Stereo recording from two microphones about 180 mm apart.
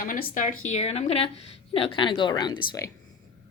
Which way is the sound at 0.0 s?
50° left (ahead or behind).